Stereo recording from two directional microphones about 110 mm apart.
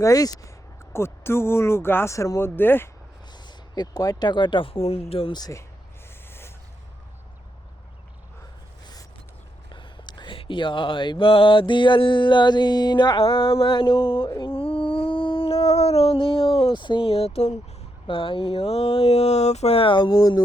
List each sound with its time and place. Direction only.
0.0 s speech: 35° left (ahead or behind)
0.9 s speech: 20° left (ahead or behind)
2.6 s speech: 20° left (ahead or behind)
3.3 s speech: 40° left (ahead or behind); by 5.3 s 60° left (ahead or behind)
5.3 s speech: 35° left (ahead or behind)
9.6 s mantra: 45° left (ahead or behind)
14.3 s a sound: 50° left (ahead or behind); by 17.6 s 80° left
18.0 s speech: 50° left (ahead or behind); by 20.4 s 35° left (ahead or behind)